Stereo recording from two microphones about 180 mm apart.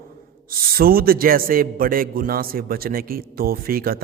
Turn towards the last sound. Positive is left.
turn(degrees=-55)  # may be behind; listen again after turning